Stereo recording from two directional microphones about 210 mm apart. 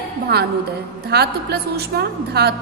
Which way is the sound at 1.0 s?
50° right (ahead or behind).